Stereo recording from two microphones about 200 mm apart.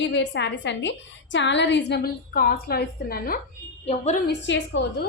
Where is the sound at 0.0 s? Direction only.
60° left (ahead or behind).